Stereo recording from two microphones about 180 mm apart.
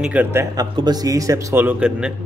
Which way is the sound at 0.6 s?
20° right (ahead or behind).